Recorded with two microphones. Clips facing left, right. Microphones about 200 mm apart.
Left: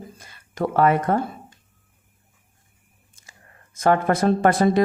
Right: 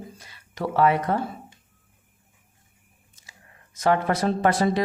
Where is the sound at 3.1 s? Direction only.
50° left (ahead or behind).